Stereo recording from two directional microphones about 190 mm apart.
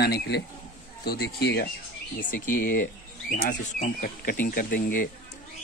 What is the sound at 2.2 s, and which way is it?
Speech, 45° left (ahead or behind).